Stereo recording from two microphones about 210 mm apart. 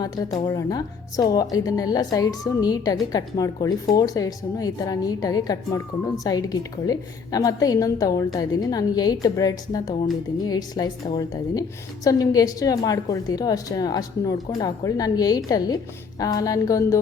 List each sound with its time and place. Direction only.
0.0 s a woman's voice: 20° left (ahead or behind)